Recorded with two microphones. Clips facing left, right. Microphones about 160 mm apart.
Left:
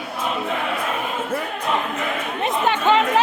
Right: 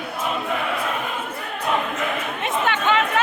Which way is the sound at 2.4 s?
35° left (ahead or behind).